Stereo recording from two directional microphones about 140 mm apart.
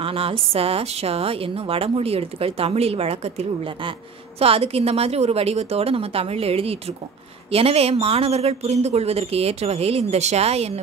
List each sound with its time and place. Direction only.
0.0 s a woman's voice: 40° right (ahead or behind)